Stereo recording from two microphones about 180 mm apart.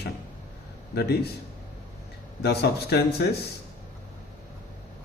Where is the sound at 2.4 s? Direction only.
65° left (ahead or behind).